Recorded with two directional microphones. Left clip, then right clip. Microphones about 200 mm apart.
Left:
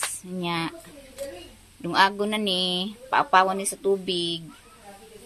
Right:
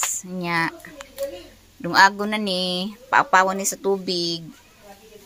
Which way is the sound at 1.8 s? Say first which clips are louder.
Right 5 dB; 10° right (ahead or behind).